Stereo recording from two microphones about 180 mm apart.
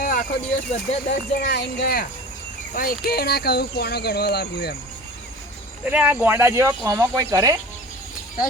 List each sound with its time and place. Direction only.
0.0 s a sound: 50° left (ahead or behind)
0.7 s speech: 50° left (ahead or behind)
1.5 s speech: 60° left (ahead or behind)
5.8 s speech: 5° right (ahead or behind)